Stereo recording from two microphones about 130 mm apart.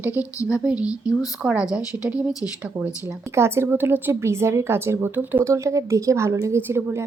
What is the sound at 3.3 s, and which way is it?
A woman's voice, 20° right (ahead or behind).